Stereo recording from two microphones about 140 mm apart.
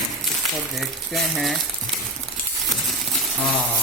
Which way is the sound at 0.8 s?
Centre (ahead or behind).